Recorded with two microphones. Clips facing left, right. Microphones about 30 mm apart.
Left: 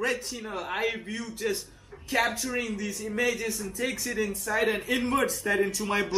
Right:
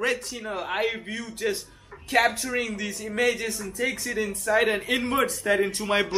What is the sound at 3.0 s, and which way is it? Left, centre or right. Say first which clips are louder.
Speech: right 4 dB; right.